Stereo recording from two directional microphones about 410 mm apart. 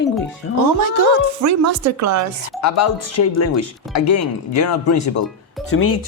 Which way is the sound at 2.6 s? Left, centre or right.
Left.